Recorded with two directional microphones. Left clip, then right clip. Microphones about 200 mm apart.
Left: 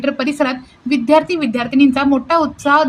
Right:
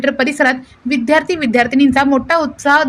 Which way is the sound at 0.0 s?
25° right (ahead or behind).